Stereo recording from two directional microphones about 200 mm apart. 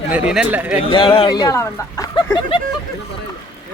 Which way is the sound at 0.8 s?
25° left (ahead or behind).